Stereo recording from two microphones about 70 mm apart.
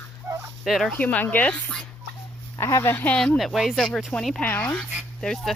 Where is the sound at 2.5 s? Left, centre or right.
Left.